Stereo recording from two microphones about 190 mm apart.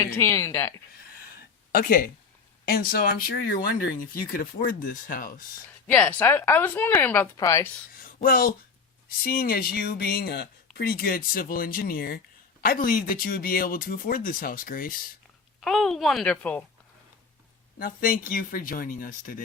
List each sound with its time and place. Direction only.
0.0 s speech: 15° left (ahead or behind)
1.7 s speech: 50° left (ahead or behind)
5.9 s speech: 10° left (ahead or behind)
7.9 s a sound: 50° left (ahead or behind)
9.2 s speech: 50° left (ahead or behind)
15.6 s speech: centre (ahead or behind)
17.7 s speech: 50° left (ahead or behind)